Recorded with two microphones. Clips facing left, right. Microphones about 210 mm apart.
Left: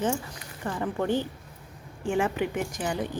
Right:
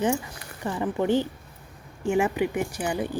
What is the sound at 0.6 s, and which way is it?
Speech, 15° right (ahead or behind).